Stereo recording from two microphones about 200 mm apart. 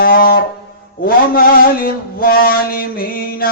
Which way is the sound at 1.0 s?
45° left (ahead or behind).